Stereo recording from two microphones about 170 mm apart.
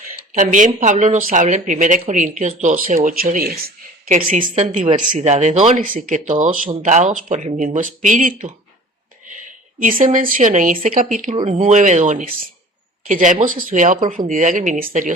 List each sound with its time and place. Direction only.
0.3 s speech: 45° right (ahead or behind)
9.8 s speech: 50° right (ahead or behind)